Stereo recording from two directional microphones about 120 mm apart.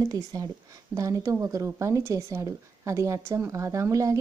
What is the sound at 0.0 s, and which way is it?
Speech, 30° right (ahead or behind).